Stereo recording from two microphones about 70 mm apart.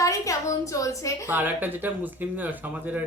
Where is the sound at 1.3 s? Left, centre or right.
Right.